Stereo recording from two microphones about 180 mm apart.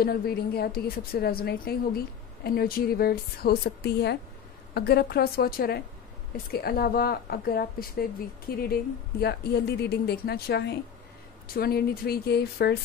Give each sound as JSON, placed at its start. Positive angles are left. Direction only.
{"t": 0.0, "sound": "a woman's voice", "side_deg": 60}